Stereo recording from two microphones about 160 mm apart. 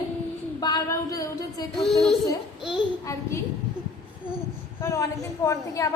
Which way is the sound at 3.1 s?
20° left (ahead or behind).